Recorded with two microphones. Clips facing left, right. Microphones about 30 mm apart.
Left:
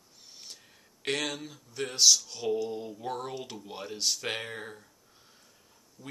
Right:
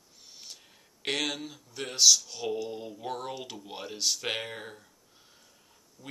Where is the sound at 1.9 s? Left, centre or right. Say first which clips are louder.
Right 1 dB; centre.